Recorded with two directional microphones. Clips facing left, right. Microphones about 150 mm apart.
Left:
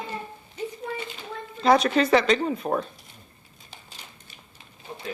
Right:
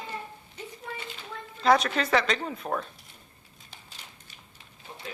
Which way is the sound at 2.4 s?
15° left (ahead or behind).